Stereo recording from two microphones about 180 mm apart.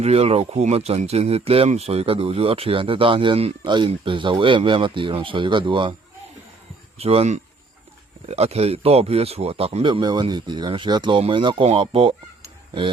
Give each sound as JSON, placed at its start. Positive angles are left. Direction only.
{"t": 0.0, "sound": "speech", "side_deg": -35}
{"t": 7.0, "sound": "speech", "side_deg": -35}